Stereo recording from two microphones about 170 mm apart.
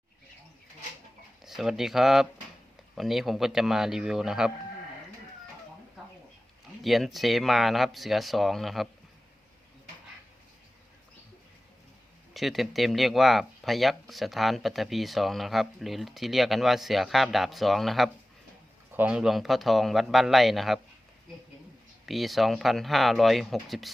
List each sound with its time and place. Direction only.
1.5 s speech: centre (ahead or behind)
6.8 s speech: centre (ahead or behind)
12.3 s speech: centre (ahead or behind)
22.0 s speech: centre (ahead or behind)